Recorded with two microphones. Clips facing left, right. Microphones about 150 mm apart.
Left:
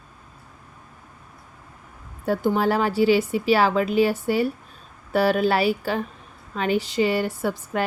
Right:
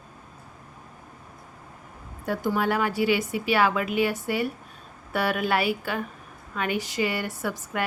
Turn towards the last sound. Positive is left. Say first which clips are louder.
# left 5 dB
turn(degrees=30)  # may be behind; listen again after turning